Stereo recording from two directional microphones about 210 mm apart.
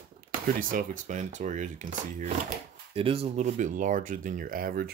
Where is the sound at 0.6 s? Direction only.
40° right (ahead or behind).